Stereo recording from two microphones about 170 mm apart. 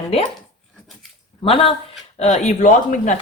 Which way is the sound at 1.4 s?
35° left (ahead or behind).